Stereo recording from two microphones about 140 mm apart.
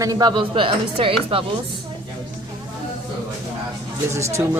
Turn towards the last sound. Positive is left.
turn(degrees=-20)  # may be behind; listen again after turning